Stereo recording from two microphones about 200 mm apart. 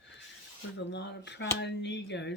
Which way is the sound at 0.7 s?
60° left (ahead or behind).